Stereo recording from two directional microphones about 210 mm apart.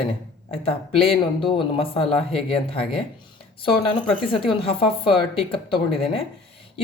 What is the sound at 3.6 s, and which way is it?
A woman's voice, 25° left (ahead or behind).